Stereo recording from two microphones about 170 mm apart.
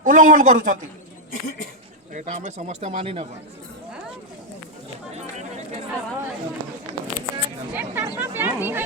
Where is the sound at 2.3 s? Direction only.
45° right (ahead or behind).